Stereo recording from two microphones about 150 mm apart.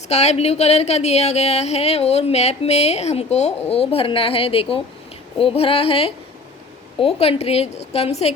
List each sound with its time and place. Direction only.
0.1 s a woman's voice: 45° left (ahead or behind)